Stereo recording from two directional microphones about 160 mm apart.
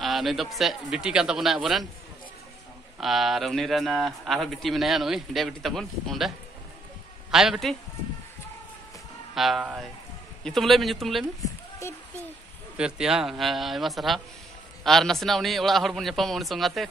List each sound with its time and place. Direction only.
0.0 s a man's voice: centre (ahead or behind)
3.0 s a man's voice: centre (ahead or behind)
9.3 s a man's voice: centre (ahead or behind)
11.8 s speech: 20° left (ahead or behind)
12.7 s a man's voice: 5° right (ahead or behind)